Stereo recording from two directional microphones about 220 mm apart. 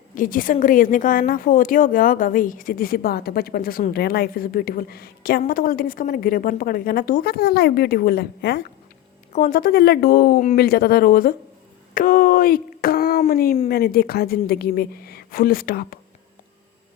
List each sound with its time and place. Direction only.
0.1 s a woman's voice: 40° left (ahead or behind)
11.9 s a sound: 40° left (ahead or behind)
13.7 s a woman's voice: 45° left (ahead or behind)